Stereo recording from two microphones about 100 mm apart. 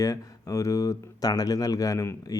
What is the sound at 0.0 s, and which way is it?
Speech, 35° left (ahead or behind).